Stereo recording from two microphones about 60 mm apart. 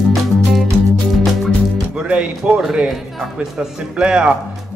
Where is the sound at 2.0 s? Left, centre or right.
Centre.